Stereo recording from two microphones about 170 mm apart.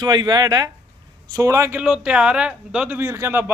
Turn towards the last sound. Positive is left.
turn(degrees=-15)  # may be behind; listen again after turning